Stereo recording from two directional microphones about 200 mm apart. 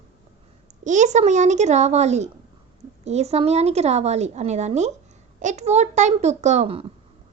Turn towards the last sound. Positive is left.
turn(degrees=-30)  # may be behind; listen again after turning